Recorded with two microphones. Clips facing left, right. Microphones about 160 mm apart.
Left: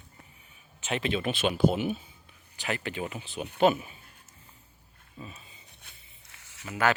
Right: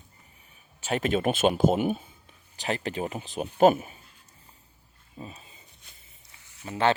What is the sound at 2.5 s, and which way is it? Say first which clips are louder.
Speech: right 3 dB; 35° right (ahead or behind).